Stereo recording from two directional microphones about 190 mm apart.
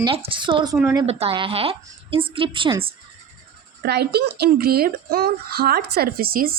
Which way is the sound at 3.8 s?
60° right (ahead or behind).